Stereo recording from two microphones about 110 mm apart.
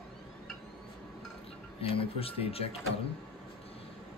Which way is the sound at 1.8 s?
60° left (ahead or behind).